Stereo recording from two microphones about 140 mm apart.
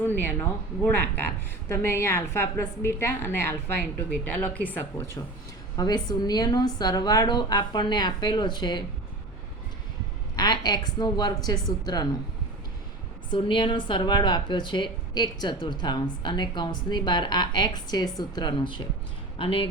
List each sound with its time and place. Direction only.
0.0 s a woman's voice: 15° left (ahead or behind)
5.7 s a woman's voice: 30° left (ahead or behind)
10.3 s a woman's voice: 30° left (ahead or behind)
13.3 s a woman's voice: 35° left (ahead or behind)